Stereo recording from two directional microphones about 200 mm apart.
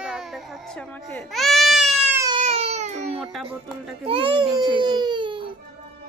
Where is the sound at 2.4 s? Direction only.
30° right (ahead or behind).